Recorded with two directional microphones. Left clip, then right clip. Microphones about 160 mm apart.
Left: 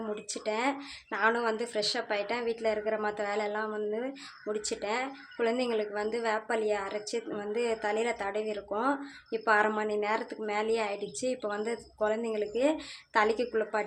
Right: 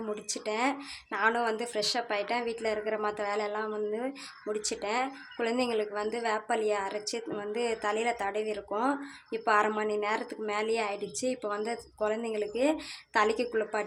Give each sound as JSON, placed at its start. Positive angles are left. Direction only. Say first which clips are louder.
{"t": 0.1, "sound": "speech", "louder": "even", "side_deg": -10}